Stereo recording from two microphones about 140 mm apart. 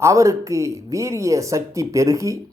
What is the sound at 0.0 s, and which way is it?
Speech, 20° right (ahead or behind).